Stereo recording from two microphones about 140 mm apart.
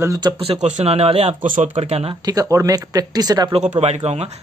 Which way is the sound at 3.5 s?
50° right (ahead or behind).